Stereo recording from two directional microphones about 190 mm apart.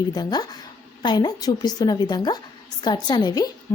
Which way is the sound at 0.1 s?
20° left (ahead or behind).